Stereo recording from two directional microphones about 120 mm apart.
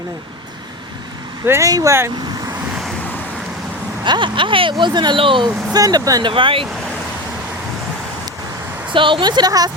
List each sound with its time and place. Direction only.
1.5 s speech: 25° right (ahead or behind)
4.0 s speech: 40° right (ahead or behind)
5.7 s a woman's voice: 30° right (ahead or behind)
6.3 s speech: 45° right (ahead or behind)
8.9 s a woman's voice: 45° right (ahead or behind)